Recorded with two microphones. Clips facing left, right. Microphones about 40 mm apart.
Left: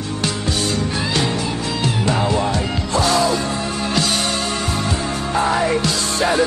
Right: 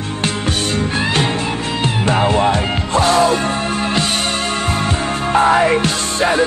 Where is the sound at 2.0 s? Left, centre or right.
Right.